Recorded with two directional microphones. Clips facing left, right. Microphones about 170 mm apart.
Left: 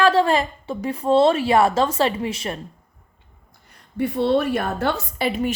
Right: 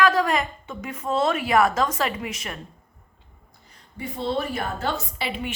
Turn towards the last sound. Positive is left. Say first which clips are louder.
# left 7 dB
turn(degrees=45)  # may be behind; listen again after turning